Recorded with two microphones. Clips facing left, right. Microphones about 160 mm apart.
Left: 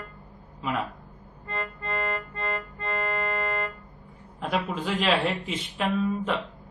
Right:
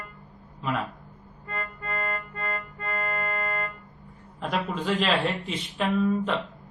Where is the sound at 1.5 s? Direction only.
25° left (ahead or behind).